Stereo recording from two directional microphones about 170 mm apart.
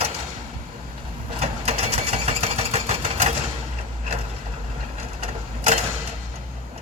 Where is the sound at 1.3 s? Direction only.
35° right (ahead or behind).